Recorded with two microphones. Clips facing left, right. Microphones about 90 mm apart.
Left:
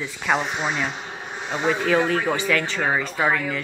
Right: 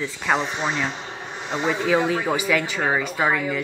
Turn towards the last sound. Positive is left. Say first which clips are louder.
# even
turn(degrees=-10)  # may be behind; listen again after turning